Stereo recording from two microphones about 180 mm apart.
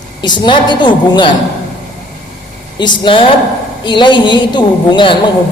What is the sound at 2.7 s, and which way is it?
A woman's voice, 25° left (ahead or behind).